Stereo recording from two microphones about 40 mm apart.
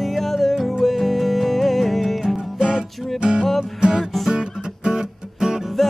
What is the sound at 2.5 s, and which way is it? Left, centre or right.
Music, centre.